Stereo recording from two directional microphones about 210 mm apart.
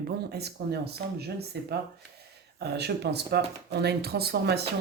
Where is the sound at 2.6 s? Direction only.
50° right (ahead or behind).